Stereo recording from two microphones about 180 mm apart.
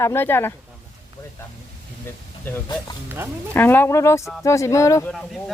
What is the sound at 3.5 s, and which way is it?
Speech, 10° left (ahead or behind).